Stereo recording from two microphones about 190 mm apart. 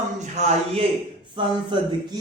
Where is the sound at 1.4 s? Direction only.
25° right (ahead or behind).